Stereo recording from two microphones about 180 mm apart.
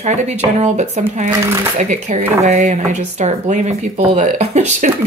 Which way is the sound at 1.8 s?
40° right (ahead or behind).